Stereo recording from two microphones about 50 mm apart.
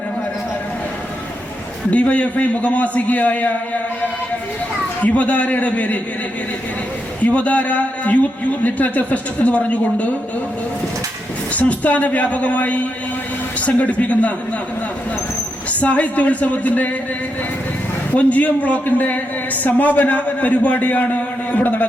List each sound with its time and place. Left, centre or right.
1.9 s a man's voice: left
5.0 s a man's voice: left
7.2 s a man's voice: left
11.5 s a man's voice: left
15.7 s a man's voice: left
18.1 s a man's voice: left